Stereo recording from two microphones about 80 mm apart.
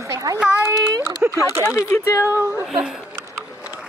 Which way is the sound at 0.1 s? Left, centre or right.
Right.